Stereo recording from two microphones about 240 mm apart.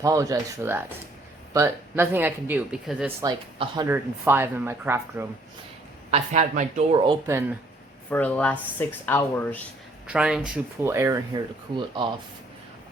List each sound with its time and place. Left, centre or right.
0.0 s speech: centre
3.2 s speech: centre
6.1 s speech: right; by 7.5 s centre
8.1 s speech: centre
10.1 s speech: centre